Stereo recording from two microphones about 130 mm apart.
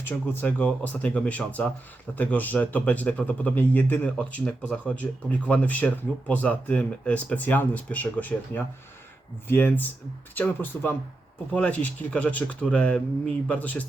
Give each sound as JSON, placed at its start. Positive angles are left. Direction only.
{"t": 0.0, "sound": "speech", "side_deg": 15}